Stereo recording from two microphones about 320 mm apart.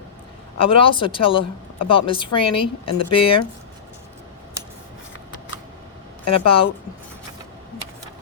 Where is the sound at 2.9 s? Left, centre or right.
Left.